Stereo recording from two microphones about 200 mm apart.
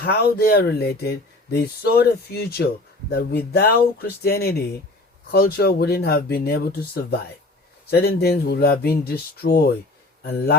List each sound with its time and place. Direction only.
0.0 s speech: 50° left (ahead or behind)